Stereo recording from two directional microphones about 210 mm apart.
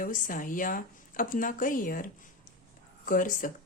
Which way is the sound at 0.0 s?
40° left (ahead or behind).